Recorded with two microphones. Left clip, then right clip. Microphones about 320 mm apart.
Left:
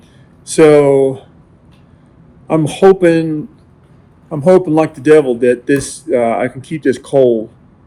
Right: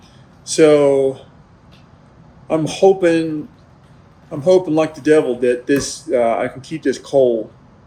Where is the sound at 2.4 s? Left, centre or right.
Left.